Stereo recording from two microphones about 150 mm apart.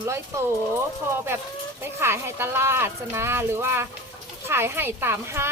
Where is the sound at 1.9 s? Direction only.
15° right (ahead or behind).